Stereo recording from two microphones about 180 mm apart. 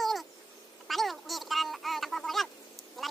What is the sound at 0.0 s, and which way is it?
Cat, centre (ahead or behind).